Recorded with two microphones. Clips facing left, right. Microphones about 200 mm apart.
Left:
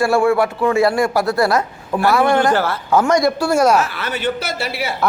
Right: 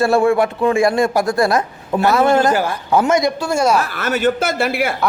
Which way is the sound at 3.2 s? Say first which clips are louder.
Left 2 dB; 10° left (ahead or behind).